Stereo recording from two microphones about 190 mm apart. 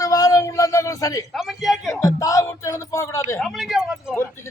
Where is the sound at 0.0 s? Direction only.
20° left (ahead or behind).